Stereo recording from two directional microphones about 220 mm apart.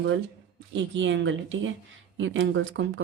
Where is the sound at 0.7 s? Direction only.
55° right (ahead or behind).